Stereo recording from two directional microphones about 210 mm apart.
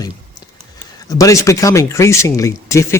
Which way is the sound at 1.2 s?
15° left (ahead or behind).